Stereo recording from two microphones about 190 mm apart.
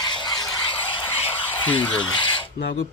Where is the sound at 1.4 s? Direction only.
10° left (ahead or behind).